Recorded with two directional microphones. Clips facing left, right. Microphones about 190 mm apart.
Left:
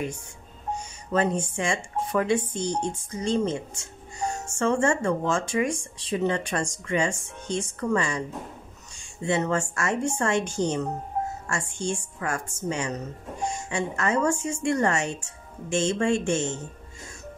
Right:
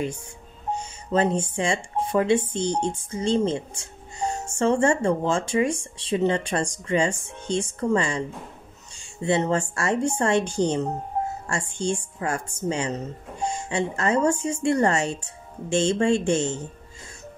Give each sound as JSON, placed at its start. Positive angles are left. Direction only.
{"t": 0.7, "sound": "music", "side_deg": -30}
{"t": 1.6, "sound": "speech", "side_deg": -30}